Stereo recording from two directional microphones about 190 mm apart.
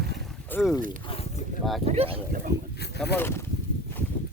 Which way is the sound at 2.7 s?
60° left (ahead or behind).